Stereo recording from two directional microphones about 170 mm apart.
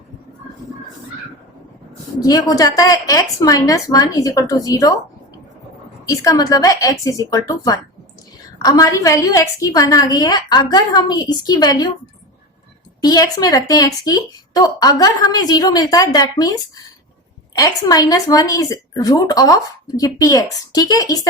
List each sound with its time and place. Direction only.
2.2 s a woman's voice: 20° left (ahead or behind)
6.1 s a woman's voice: 20° left (ahead or behind)
13.0 s a woman's voice: 25° left (ahead or behind)